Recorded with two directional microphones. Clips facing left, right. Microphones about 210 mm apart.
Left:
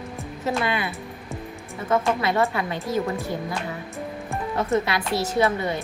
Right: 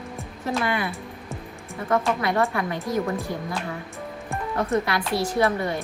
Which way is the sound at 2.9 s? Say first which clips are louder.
Left 1 dB; 5° left (ahead or behind).